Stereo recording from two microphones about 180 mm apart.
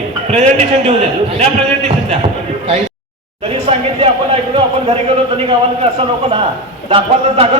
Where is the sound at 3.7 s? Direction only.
35° right (ahead or behind).